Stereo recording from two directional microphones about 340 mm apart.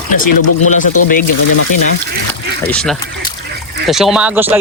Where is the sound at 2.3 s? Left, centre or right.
Centre.